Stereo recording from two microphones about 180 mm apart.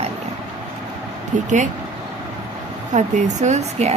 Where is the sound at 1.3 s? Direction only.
40° right (ahead or behind).